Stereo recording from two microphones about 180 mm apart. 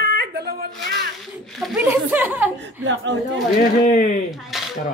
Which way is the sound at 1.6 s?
Centre (ahead or behind).